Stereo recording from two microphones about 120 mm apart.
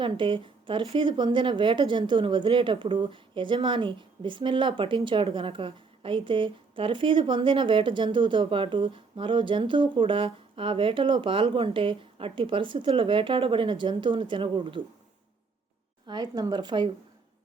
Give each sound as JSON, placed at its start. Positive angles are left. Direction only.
{"t": 0.0, "sound": "speech", "side_deg": -45}
{"t": 16.0, "sound": "speech", "side_deg": -35}